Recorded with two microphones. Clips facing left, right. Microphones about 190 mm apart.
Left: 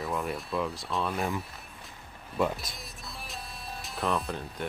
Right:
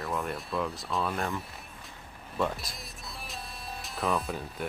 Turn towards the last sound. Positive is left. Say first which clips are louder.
# even
turn(degrees=0)  # may be behind; listen again after turning